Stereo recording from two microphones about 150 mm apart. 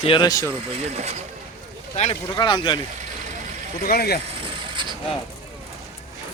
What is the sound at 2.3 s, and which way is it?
Speech, 30° left (ahead or behind).